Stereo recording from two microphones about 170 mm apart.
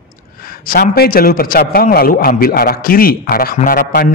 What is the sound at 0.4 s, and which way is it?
A man's voice, 60° left (ahead or behind).